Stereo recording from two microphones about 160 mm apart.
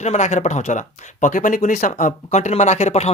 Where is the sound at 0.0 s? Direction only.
45° left (ahead or behind).